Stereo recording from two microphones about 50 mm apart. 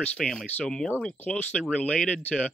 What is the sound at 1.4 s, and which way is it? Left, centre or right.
Speech, left.